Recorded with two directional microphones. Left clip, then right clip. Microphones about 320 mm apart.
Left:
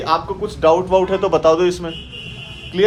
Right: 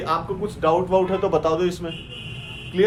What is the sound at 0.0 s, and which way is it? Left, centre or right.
Speech, left.